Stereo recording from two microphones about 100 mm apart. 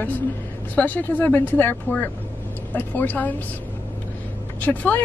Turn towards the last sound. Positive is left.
turn(degrees=20)  # may be behind; listen again after turning